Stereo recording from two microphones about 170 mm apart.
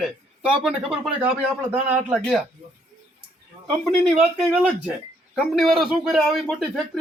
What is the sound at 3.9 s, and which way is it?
A man's voice, centre (ahead or behind).